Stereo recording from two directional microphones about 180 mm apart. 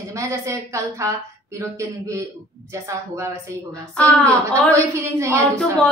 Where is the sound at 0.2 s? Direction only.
15° right (ahead or behind).